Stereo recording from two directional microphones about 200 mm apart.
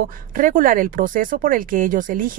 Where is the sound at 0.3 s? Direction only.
40° right (ahead or behind).